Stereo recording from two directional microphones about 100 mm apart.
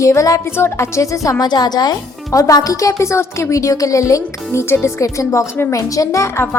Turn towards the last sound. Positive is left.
turn(degrees=30)  # may be behind; listen again after turning